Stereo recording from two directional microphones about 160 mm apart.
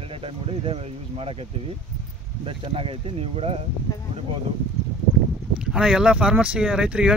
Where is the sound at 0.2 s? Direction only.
35° right (ahead or behind).